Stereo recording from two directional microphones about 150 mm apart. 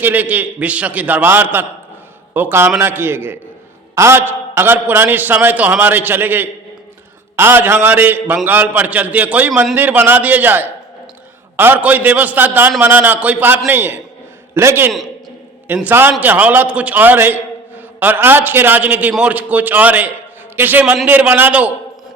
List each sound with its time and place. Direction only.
0.0 s a man's voice: 10° right (ahead or behind)